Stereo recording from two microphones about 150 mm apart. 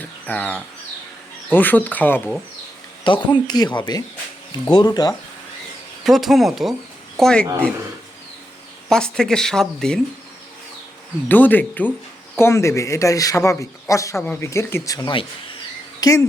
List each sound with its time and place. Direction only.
0.0 s bird: 10° left (ahead or behind)
1.5 s speech: 10° left (ahead or behind)
3.0 s speech: 30° left (ahead or behind)
6.1 s speech: centre (ahead or behind)
8.9 s speech: 5° left (ahead or behind)
11.3 s speech: 10° left (ahead or behind); by 15.3 s 35° left (ahead or behind)
16.0 s speech: 20° left (ahead or behind)